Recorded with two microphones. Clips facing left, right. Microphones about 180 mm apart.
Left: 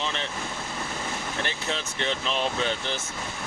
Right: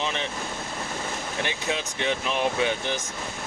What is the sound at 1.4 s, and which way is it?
Speech, 15° right (ahead or behind).